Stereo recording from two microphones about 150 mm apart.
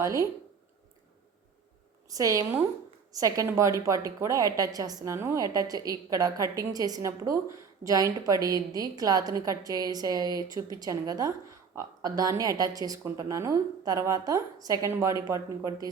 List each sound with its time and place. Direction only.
0.0 s a woman's voice: 20° right (ahead or behind)
2.0 s a woman's voice: 20° right (ahead or behind)